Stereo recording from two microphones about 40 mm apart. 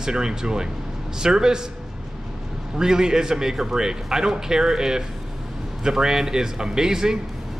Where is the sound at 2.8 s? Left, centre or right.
Centre.